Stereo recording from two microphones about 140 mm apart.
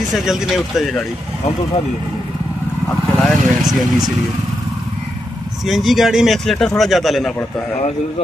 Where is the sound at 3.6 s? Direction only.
Centre (ahead or behind).